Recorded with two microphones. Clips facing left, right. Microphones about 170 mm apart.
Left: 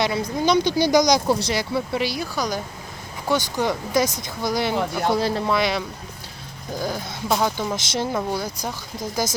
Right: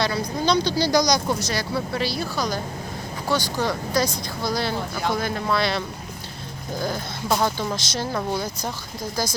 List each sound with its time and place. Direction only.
0.0 s speech: 20° left (ahead or behind)
5.0 s speech: 30° left (ahead or behind)
5.5 s speech: 15° left (ahead or behind)